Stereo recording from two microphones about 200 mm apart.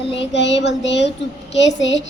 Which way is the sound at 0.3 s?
60° left (ahead or behind).